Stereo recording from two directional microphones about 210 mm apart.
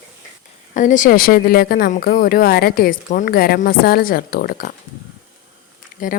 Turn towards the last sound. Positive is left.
turn(degrees=40)  # may be behind; listen again after turning